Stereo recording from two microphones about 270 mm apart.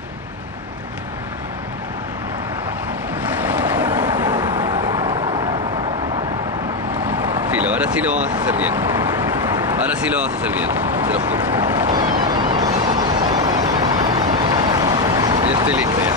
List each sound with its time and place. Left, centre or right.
3.2 s boat: centre
4.1 s vehicle: centre
7.1 s vehicle: centre